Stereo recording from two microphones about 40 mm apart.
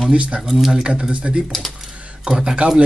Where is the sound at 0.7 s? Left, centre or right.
Right.